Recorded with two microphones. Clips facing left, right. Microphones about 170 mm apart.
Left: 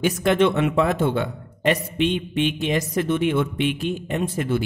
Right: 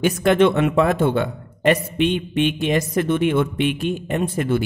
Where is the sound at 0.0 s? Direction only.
55° right (ahead or behind).